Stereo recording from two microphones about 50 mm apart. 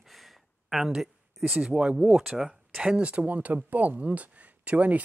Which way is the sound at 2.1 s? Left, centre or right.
Centre.